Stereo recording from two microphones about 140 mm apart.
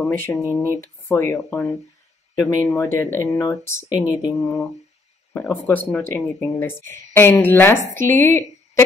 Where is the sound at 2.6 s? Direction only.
20° left (ahead or behind).